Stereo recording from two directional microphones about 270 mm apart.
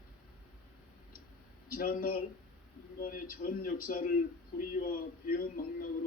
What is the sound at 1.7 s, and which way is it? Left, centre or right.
A man's voice, left.